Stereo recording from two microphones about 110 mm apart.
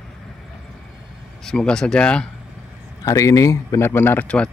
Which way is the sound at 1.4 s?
5° left (ahead or behind).